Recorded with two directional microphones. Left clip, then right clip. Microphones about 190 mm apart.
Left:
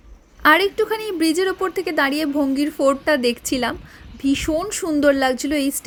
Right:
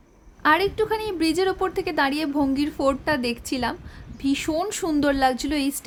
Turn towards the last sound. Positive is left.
turn(degrees=10)  # may be behind; listen again after turning